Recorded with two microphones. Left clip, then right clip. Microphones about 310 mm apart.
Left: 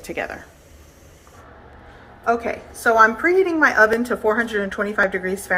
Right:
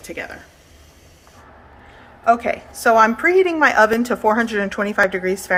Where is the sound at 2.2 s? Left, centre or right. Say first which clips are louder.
Right 5 dB; right.